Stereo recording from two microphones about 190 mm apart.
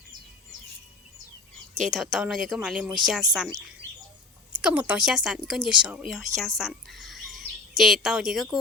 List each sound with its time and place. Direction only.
1.8 s speech: centre (ahead or behind)
4.5 s speech: 5° right (ahead or behind)